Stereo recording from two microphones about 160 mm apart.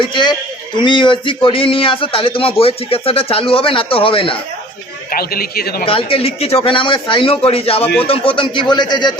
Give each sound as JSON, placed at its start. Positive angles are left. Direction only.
{"t": 0.0, "sound": "speech", "side_deg": 30}
{"t": 5.1, "sound": "a man's voice", "side_deg": 70}
{"t": 5.8, "sound": "speech", "side_deg": 35}